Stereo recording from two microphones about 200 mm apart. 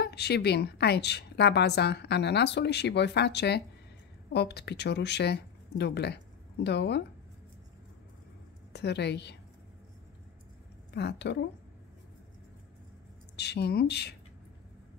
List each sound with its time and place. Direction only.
0.0 s a woman's voice: 55° left (ahead or behind)
8.7 s a woman's voice: 55° left (ahead or behind)
10.9 s a woman's voice: 55° left (ahead or behind)
13.4 s a woman's voice: 55° left (ahead or behind)